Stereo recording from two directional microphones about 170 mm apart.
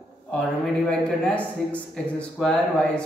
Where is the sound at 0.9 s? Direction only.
5° left (ahead or behind).